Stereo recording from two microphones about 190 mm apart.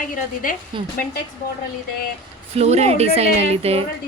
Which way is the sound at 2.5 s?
35° right (ahead or behind).